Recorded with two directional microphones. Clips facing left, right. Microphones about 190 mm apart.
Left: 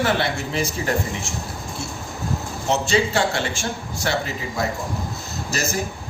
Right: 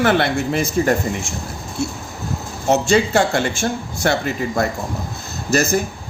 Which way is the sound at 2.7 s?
45° right (ahead or behind).